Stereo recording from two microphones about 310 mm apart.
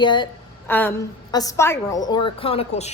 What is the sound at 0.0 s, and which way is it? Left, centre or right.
A woman's voice, centre.